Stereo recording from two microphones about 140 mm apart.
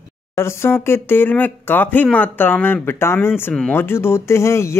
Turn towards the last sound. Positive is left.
turn(degrees=20)  # may be behind; listen again after turning